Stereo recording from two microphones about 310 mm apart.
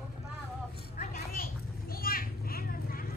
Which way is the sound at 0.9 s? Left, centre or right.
Left.